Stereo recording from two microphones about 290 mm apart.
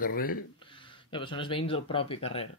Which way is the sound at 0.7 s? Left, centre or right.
Centre.